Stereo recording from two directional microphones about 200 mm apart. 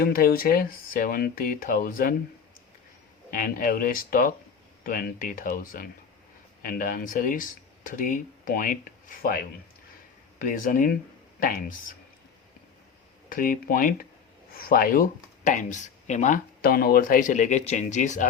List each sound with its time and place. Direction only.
0.0 s speech: 45° left (ahead or behind)
3.2 s speech: 45° left (ahead or behind)
13.3 s speech: 45° left (ahead or behind)